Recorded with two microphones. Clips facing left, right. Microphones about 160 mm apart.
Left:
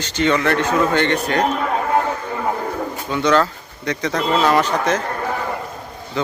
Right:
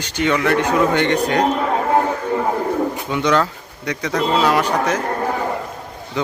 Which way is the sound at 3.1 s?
15° right (ahead or behind).